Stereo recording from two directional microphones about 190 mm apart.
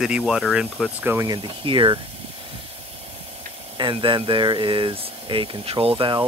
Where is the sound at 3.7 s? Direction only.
25° right (ahead or behind).